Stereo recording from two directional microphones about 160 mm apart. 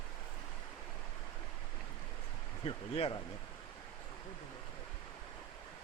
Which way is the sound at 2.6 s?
35° left (ahead or behind).